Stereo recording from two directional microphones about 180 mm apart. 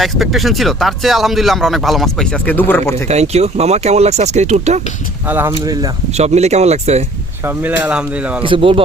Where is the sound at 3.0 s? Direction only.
35° right (ahead or behind).